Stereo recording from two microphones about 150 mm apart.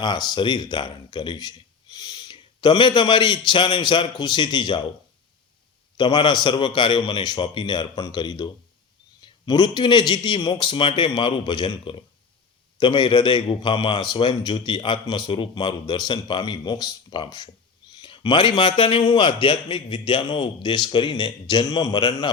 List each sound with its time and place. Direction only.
0.0 s a man's voice: 30° left (ahead or behind)
6.0 s a man's voice: 30° left (ahead or behind)